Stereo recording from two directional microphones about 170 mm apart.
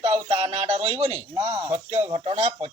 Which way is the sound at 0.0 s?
35° right (ahead or behind).